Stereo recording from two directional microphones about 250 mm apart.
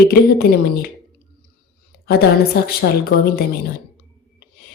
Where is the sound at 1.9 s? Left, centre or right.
Left.